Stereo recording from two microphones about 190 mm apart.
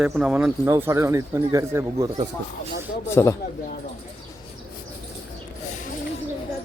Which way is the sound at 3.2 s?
15° left (ahead or behind).